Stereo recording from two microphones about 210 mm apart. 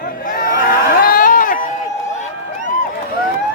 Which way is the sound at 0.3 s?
40° left (ahead or behind).